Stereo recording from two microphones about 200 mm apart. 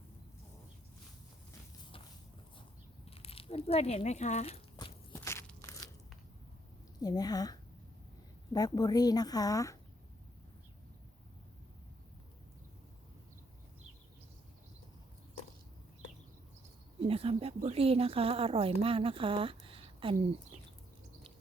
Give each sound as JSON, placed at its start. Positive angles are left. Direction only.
{"t": 3.2, "sound": "speech", "side_deg": 30}
{"t": 4.8, "sound": "a sound", "side_deg": 15}
{"t": 7.0, "sound": "speech", "side_deg": 20}
{"t": 8.5, "sound": "speech", "side_deg": 20}
{"t": 17.1, "sound": "speech", "side_deg": -30}